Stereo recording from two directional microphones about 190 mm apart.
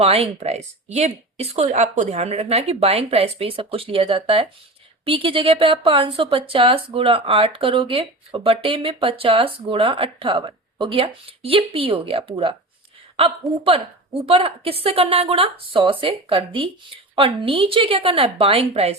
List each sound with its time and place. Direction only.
0.0 s a woman's voice: 30° right (ahead or behind)
13.7 s a woman's voice: 30° right (ahead or behind)